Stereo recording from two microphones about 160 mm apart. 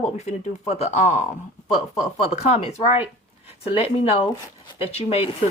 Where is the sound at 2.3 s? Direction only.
40° left (ahead or behind).